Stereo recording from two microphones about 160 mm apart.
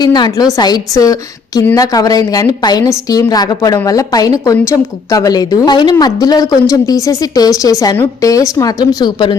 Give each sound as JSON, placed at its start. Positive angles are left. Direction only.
{"t": 0.0, "sound": "a woman's voice", "side_deg": 25}